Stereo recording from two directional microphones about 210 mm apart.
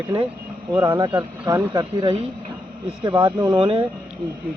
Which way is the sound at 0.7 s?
15° right (ahead or behind).